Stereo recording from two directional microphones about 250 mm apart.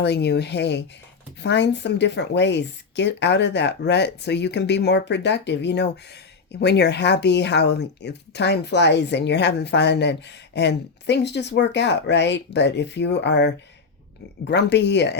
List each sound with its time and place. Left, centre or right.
0.0 s speech: left